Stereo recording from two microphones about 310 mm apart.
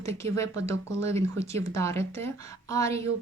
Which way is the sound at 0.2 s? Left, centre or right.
Centre.